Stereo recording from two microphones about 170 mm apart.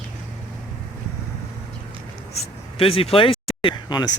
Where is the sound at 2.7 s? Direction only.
35° left (ahead or behind).